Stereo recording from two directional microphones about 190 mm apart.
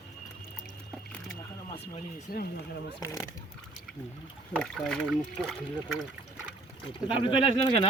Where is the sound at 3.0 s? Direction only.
15° left (ahead or behind).